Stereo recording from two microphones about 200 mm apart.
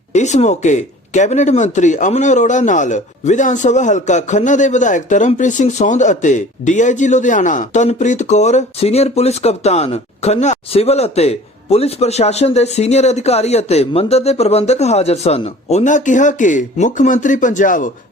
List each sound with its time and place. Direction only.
0.1 s speech: 35° left (ahead or behind)